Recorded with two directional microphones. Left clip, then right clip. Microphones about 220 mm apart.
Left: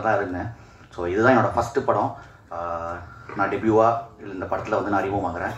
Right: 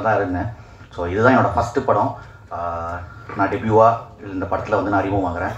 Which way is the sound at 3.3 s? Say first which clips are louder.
Right 4 dB; 50° left (ahead or behind).